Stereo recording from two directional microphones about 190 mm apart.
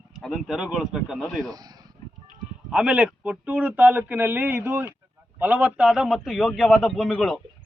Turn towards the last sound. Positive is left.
turn(degrees=0)  # may be behind; listen again after turning